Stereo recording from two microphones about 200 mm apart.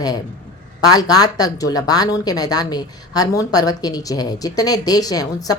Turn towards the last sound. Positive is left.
turn(degrees=20)  # may be behind; listen again after turning